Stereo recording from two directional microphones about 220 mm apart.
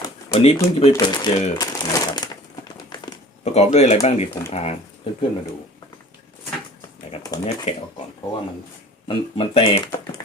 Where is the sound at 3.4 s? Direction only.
30° left (ahead or behind).